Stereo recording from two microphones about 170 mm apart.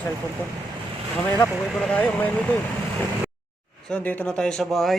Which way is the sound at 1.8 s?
5° left (ahead or behind).